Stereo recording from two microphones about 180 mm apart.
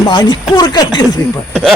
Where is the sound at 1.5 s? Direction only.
Centre (ahead or behind).